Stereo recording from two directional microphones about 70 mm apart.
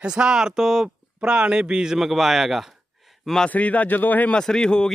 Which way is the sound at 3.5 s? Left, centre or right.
Left.